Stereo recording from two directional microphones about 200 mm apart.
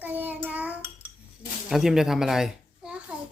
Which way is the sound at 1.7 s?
Centre (ahead or behind).